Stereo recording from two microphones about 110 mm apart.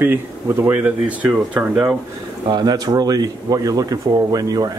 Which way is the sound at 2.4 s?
40° right (ahead or behind).